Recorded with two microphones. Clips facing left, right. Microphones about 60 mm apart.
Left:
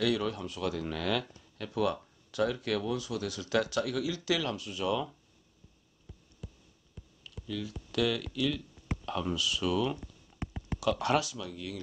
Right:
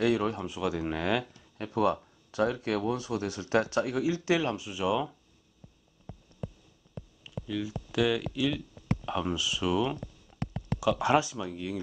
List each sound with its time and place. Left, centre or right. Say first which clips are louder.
0.0 s speech: right 3 dB; right
0.5 s speech: right 3 dB; centre
4.6 s speech: right 3 dB; centre
7.2 s speech: right 4 dB; centre
9.9 s a sound: right 4 dB; centre
10.8 s speech: right 3 dB; centre